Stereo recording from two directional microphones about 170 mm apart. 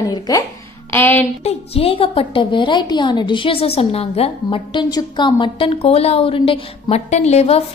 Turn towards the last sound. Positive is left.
turn(degrees=40)  # may be behind; listen again after turning